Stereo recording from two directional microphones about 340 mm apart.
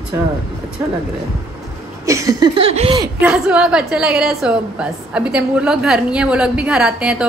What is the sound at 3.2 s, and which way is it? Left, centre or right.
A woman's voice, centre.